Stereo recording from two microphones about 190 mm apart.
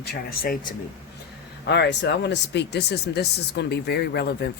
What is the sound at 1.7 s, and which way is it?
Speech, 65° left (ahead or behind).